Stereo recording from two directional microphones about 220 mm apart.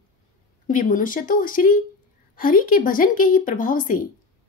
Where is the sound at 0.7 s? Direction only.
35° left (ahead or behind).